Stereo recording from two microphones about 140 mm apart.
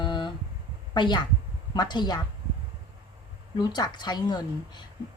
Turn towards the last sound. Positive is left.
turn(degrees=30)  # may be behind; listen again after turning